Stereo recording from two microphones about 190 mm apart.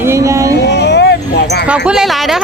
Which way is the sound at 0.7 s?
65° left (ahead or behind).